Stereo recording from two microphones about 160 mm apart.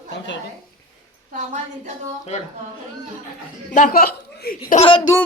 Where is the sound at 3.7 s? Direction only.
60° left (ahead or behind).